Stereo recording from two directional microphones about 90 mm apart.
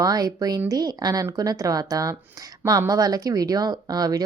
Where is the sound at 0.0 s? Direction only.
45° right (ahead or behind).